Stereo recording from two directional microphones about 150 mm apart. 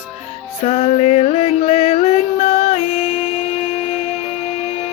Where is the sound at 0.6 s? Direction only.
45° left (ahead or behind).